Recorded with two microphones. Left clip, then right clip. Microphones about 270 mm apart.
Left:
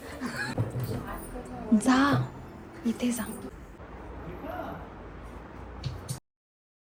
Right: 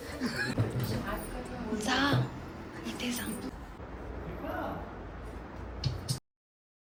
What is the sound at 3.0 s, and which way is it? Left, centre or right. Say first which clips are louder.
Speech: left 2 dB; centre.